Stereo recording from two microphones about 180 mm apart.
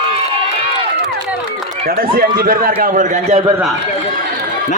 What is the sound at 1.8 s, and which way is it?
A man's voice, 55° right (ahead or behind).